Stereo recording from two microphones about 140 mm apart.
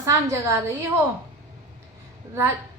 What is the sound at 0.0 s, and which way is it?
Speech, 20° right (ahead or behind).